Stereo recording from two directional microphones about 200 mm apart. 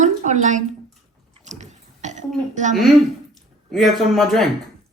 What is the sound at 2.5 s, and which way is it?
Speech, 40° right (ahead or behind).